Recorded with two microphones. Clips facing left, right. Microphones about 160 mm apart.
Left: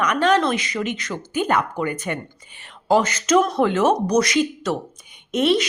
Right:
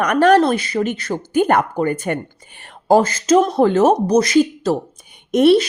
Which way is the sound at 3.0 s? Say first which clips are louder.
Right 4 dB; 30° right (ahead or behind).